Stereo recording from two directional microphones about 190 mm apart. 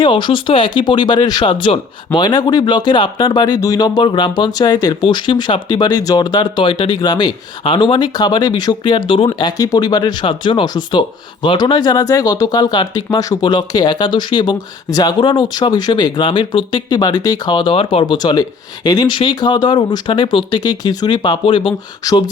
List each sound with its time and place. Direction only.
0.0 s speech: 25° left (ahead or behind)